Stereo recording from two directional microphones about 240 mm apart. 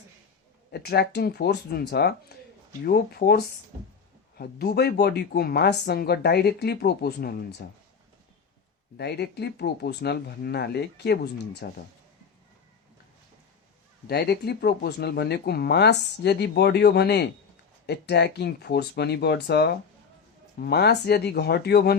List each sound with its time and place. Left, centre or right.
0.7 s speech: left
9.0 s speech: left
14.1 s speech: left